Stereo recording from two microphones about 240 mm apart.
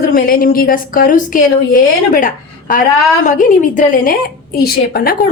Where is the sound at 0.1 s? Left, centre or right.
Left.